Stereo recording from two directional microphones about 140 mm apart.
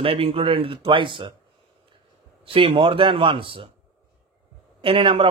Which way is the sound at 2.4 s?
40° right (ahead or behind).